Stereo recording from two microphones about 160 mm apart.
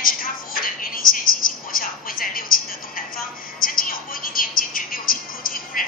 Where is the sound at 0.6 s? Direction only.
60° left (ahead or behind).